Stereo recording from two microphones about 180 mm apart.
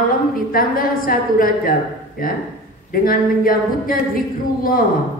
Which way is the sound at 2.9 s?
50° left (ahead or behind).